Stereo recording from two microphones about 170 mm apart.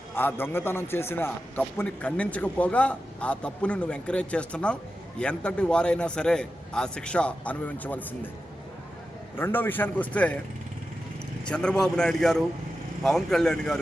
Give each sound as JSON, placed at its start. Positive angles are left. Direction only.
{"t": 0.1, "sound": "a man's voice", "side_deg": 10}
{"t": 9.3, "sound": "a man's voice", "side_deg": 10}
{"t": 11.4, "sound": "a man's voice", "side_deg": 5}